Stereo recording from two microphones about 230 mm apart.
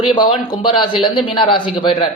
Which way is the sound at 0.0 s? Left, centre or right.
Left.